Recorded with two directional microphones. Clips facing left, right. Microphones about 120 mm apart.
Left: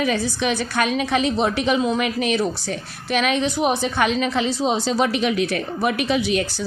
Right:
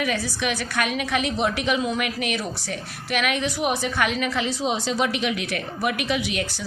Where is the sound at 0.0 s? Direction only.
30° left (ahead or behind).